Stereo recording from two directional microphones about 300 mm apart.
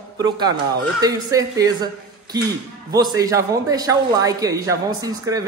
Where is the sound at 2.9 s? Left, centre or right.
Centre.